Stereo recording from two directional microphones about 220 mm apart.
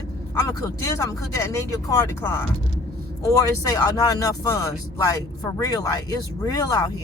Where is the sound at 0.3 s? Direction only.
15° left (ahead or behind).